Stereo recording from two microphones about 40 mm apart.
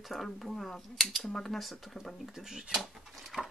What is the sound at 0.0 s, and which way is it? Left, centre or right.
Speech, centre.